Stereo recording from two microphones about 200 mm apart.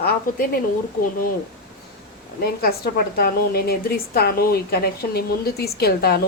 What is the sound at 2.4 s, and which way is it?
A woman's voice, 50° left (ahead or behind).